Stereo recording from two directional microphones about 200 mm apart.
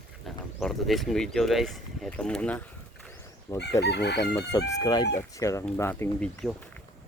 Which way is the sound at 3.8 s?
55° left (ahead or behind).